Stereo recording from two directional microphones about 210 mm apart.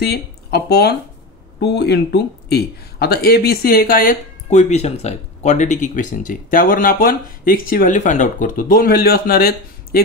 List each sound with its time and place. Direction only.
0.0 s speech: 50° left (ahead or behind)